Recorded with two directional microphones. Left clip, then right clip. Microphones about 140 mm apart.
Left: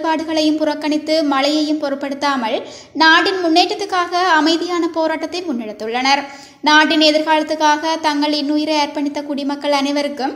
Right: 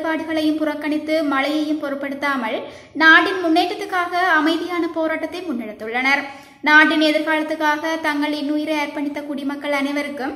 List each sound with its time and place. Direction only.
0.0 s a woman's voice: 35° left (ahead or behind)